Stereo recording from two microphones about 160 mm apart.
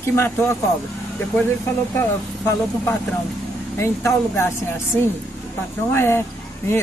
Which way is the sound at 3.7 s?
15° left (ahead or behind).